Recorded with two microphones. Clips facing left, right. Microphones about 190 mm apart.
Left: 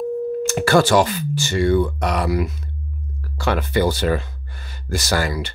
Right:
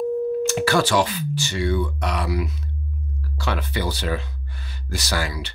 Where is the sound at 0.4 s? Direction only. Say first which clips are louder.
Left 7 dB; 50° left (ahead or behind).